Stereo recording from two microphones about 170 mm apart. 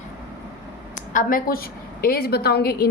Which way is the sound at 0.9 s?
50° left (ahead or behind).